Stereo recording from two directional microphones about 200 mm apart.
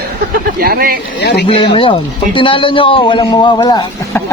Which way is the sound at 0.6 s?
50° right (ahead or behind).